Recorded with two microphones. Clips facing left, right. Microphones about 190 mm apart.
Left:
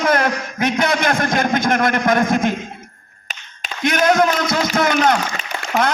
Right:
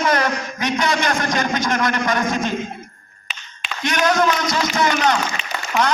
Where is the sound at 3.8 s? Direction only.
50° left (ahead or behind).